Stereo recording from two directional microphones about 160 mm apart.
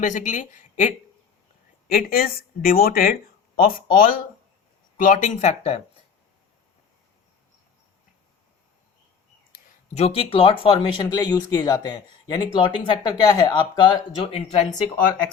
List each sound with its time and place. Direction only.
0.0 s a woman's voice: 50° left (ahead or behind)
1.9 s a woman's voice: 65° left (ahead or behind); by 5.8 s 45° left (ahead or behind)
9.5 s speech: 45° left (ahead or behind)